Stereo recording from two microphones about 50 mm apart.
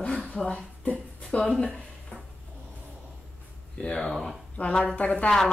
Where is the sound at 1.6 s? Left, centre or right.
Left.